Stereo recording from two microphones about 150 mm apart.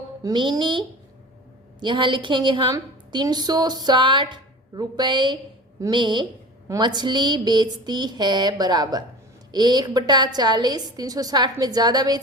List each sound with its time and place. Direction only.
0.2 s a woman's voice: 25° right (ahead or behind)